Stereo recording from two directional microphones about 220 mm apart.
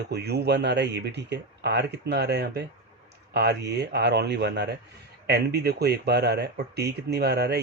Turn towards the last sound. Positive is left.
turn(degrees=-50)  # may be behind; listen again after turning